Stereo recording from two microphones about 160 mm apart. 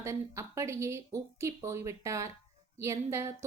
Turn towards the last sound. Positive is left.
turn(degrees=-20)  # may be behind; listen again after turning